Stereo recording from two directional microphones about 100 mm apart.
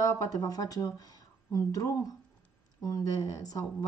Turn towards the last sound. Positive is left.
turn(degrees=35)  # may be behind; listen again after turning